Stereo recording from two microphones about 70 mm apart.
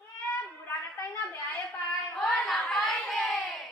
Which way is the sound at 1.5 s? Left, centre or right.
Left.